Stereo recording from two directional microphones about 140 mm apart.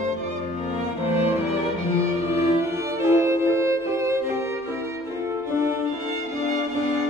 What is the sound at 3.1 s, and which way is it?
Music, 20° right (ahead or behind).